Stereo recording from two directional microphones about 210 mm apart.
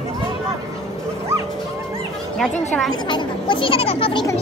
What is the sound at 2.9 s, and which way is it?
Speech, 20° left (ahead or behind).